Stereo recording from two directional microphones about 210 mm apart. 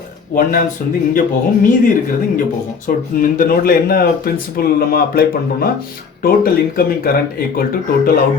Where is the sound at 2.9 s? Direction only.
40° left (ahead or behind).